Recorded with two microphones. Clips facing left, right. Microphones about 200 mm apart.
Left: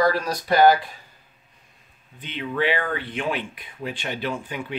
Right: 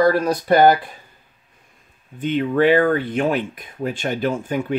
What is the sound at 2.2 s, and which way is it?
Speech, 45° right (ahead or behind).